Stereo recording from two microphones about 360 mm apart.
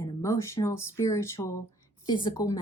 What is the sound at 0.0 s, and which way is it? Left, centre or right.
Speech, centre.